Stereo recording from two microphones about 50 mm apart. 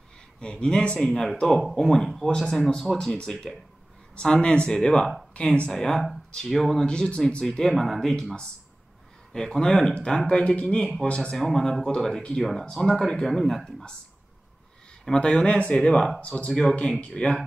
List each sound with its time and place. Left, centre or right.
0.4 s speech: centre
3.2 s speech: centre
5.3 s speech: left
5.7 s speech: centre
6.9 s speech: centre
7.7 s speech: centre
11.3 s speech: centre
15.1 s speech: left